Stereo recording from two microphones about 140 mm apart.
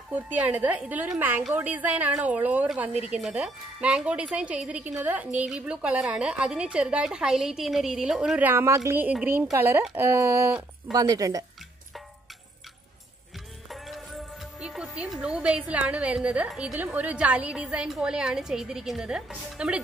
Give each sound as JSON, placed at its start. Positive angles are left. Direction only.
{"t": 0.1, "sound": "a woman's voice", "side_deg": -10}
{"t": 13.7, "sound": "speech", "side_deg": 0}